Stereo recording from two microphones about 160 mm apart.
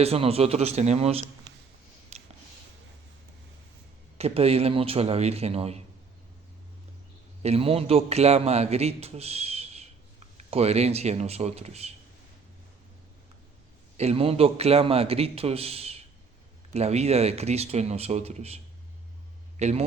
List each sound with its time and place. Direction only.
0.0 s a man's voice: 40° right (ahead or behind)
2.1 s a sound: 40° right (ahead or behind)
4.2 s a man's voice: 40° right (ahead or behind)
7.4 s a man's voice: 40° right (ahead or behind)
13.9 s a man's voice: 40° right (ahead or behind)